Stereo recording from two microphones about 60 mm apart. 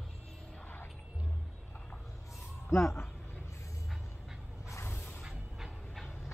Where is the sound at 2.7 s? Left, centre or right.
Left.